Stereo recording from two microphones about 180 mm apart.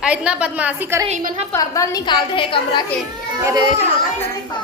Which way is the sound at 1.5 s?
20° left (ahead or behind).